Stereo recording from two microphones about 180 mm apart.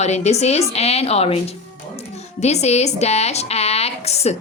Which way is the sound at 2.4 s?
35° left (ahead or behind).